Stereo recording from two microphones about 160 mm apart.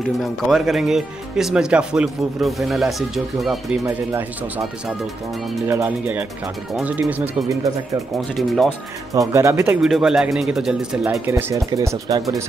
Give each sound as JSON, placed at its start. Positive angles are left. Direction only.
{"t": 0.2, "sound": "speech", "side_deg": 0}
{"t": 3.8, "sound": "speech", "side_deg": -15}
{"t": 5.7, "sound": "speech", "side_deg": -15}
{"t": 8.2, "sound": "speech", "side_deg": 0}
{"t": 9.1, "sound": "speech", "side_deg": -20}
{"t": 9.8, "sound": "speech", "side_deg": -5}